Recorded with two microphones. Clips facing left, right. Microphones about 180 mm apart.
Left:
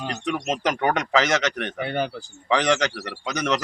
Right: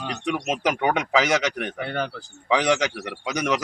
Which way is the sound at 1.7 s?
10° left (ahead or behind).